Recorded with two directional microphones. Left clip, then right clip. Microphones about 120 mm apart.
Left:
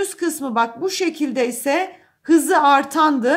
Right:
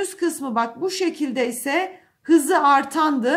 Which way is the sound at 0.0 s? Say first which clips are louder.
Left 2 dB; 25° left (ahead or behind).